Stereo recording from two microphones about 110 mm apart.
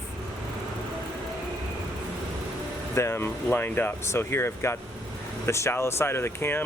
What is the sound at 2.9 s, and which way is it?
Speech, 25° left (ahead or behind).